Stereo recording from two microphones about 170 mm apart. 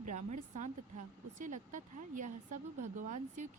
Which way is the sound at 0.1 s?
45° right (ahead or behind).